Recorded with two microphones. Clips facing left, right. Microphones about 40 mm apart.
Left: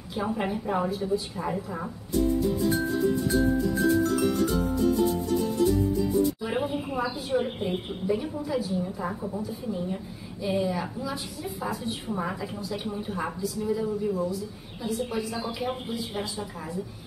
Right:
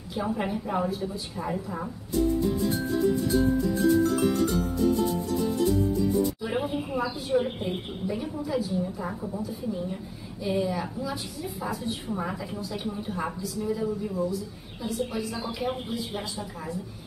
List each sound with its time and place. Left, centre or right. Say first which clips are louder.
0.1 s a woman's voice: even; centre
6.4 s a woman's voice: even; centre